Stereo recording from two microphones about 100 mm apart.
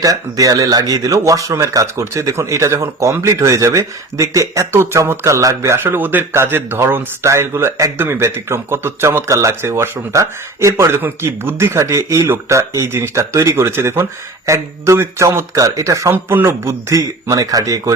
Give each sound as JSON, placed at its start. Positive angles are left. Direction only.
{"t": 0.0, "sound": "speech", "side_deg": -35}